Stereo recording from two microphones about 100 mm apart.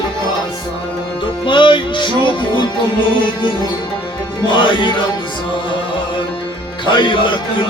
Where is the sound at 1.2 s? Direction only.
55° left (ahead or behind).